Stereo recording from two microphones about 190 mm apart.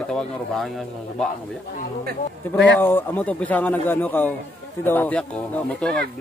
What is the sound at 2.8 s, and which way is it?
A man's voice, 10° left (ahead or behind).